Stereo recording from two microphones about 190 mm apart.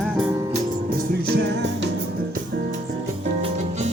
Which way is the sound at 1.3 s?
65° right (ahead or behind).